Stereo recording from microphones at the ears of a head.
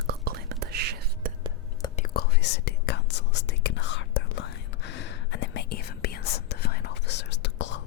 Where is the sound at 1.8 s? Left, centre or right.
Left.